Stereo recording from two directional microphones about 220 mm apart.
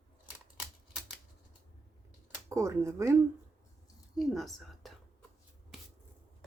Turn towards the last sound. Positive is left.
turn(degrees=0)  # may be behind; listen again after turning